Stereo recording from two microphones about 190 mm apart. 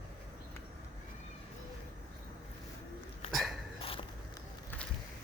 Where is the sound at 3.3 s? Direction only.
Centre (ahead or behind).